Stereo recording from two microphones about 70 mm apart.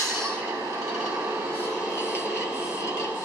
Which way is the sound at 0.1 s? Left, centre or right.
Right.